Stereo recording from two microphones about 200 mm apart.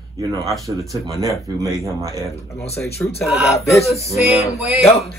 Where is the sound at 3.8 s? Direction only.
30° left (ahead or behind).